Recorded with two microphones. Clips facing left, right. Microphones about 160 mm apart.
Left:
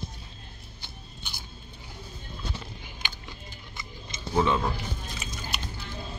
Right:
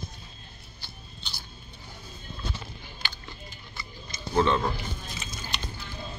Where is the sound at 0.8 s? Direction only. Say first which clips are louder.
Even; 15° left (ahead or behind).